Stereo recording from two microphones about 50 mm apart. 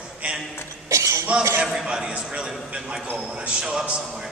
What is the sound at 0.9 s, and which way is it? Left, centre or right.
Speech, right.